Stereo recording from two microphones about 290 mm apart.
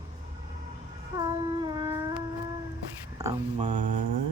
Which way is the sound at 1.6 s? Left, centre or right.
Centre.